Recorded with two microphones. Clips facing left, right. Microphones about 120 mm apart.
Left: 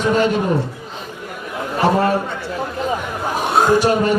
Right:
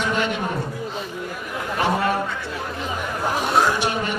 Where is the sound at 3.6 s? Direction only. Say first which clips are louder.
Left 7 dB; 40° left (ahead or behind).